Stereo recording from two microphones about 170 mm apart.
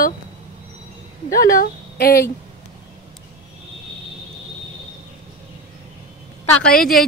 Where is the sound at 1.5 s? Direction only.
60° left (ahead or behind).